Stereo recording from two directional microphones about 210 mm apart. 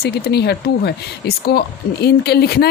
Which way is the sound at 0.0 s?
50° left (ahead or behind).